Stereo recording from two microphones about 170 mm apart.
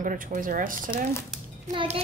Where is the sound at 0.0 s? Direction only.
50° right (ahead or behind).